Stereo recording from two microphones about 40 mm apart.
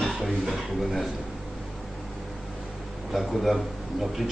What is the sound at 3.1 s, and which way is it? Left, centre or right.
A man's voice, centre.